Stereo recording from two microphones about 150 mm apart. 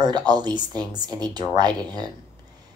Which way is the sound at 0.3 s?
25° right (ahead or behind).